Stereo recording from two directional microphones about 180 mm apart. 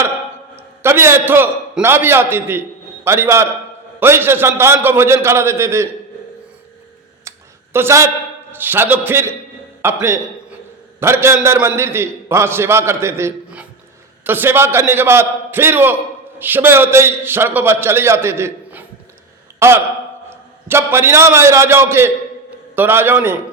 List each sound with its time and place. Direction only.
0.5 s a man's voice: 15° right (ahead or behind)
7.3 s a sound: 15° right (ahead or behind)
8.5 s a man's voice: 10° right (ahead or behind)